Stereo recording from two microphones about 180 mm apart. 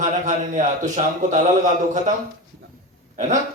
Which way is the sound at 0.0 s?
45° right (ahead or behind).